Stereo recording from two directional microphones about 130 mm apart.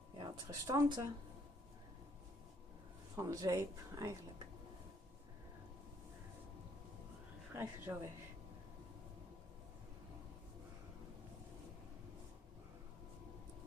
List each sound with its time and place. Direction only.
0.2 s speech: 25° right (ahead or behind)
3.2 s speech: 25° right (ahead or behind)
7.5 s speech: 15° right (ahead or behind)